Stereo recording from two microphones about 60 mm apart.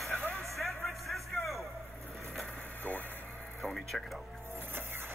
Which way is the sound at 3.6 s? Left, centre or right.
Centre.